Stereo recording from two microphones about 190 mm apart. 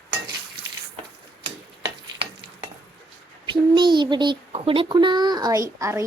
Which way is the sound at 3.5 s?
25° right (ahead or behind).